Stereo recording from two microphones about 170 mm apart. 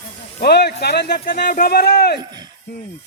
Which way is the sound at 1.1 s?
60° left (ahead or behind).